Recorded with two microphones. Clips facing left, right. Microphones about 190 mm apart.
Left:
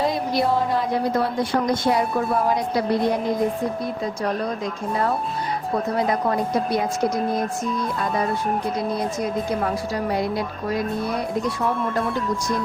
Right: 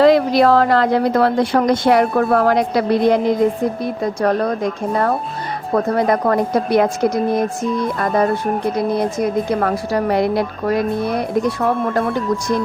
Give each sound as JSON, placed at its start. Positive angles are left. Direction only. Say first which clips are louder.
{"t": 0.0, "sound": "a woman's voice", "louder": "right 10 dB", "side_deg": -90}
{"t": 4.0, "sound": "speech", "louder": "right 9 dB", "side_deg": -60}
{"t": 7.9, "sound": "speech", "louder": "right 6 dB", "side_deg": -65}